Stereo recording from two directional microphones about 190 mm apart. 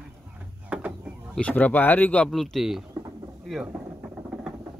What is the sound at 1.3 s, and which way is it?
Speech, 10° left (ahead or behind).